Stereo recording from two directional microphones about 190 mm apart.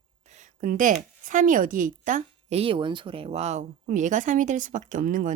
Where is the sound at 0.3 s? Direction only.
45° right (ahead or behind).